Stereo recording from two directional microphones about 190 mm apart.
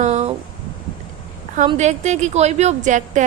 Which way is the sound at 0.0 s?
35° right (ahead or behind).